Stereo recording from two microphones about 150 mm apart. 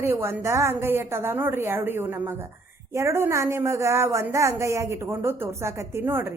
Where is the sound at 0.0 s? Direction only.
15° right (ahead or behind).